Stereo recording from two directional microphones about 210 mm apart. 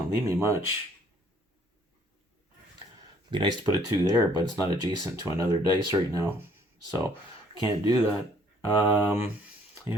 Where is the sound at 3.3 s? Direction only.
25° right (ahead or behind).